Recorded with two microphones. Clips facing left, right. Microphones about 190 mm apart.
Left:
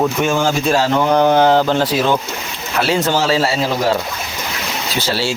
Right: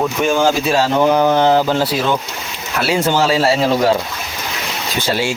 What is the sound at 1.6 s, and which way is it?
Speech, 10° right (ahead or behind).